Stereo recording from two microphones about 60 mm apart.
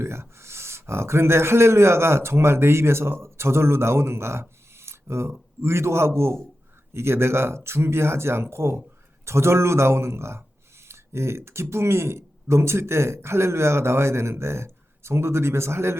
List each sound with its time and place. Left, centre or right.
0.0 s speech: right